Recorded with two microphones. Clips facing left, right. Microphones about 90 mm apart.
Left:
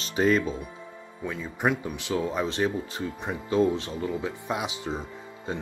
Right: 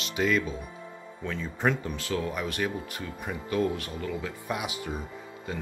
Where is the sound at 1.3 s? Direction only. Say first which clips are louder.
Left 1 dB; 15° left (ahead or behind).